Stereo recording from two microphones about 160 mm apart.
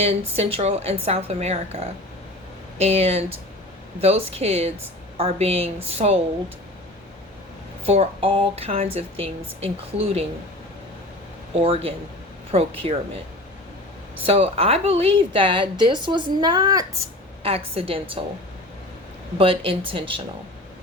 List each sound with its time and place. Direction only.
0.0 s a woman's voice: 40° right (ahead or behind)
7.9 s a woman's voice: 35° right (ahead or behind)
11.6 s a woman's voice: 35° right (ahead or behind)
14.3 s a woman's voice: 35° right (ahead or behind)
17.4 s a woman's voice: 35° right (ahead or behind)
19.4 s a woman's voice: 35° right (ahead or behind)